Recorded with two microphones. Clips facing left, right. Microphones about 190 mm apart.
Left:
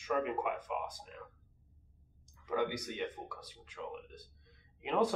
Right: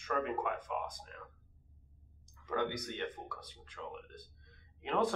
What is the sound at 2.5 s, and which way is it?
Speech, 10° left (ahead or behind).